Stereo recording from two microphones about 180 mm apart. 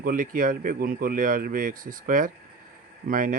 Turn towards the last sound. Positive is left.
turn(degrees=-50)  # may be behind; listen again after turning